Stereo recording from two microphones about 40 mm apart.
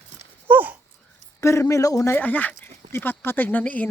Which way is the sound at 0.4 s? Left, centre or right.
Right.